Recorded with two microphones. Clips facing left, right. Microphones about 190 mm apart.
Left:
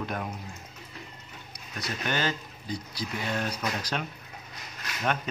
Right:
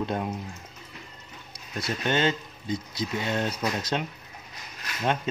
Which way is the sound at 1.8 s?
25° right (ahead or behind).